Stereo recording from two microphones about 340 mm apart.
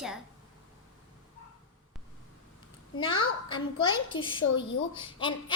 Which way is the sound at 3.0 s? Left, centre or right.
Centre.